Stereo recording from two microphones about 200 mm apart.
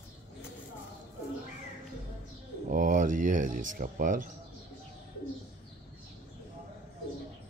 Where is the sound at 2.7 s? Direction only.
40° right (ahead or behind).